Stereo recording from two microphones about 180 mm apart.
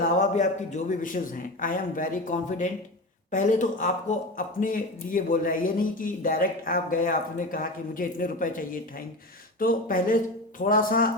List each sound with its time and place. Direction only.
0.2 s a man's voice: 40° left (ahead or behind)